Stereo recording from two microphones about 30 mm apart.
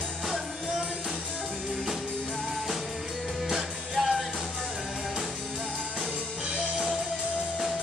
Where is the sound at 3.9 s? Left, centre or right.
Right.